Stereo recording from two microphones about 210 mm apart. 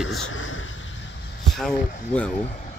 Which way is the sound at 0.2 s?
70° left (ahead or behind).